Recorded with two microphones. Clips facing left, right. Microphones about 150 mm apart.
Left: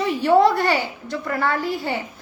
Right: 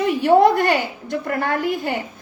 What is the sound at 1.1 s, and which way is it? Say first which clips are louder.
Speech: right 1 dB; 50° right (ahead or behind).